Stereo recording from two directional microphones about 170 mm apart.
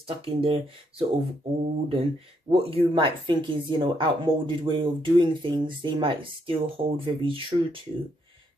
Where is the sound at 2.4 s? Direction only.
35° right (ahead or behind).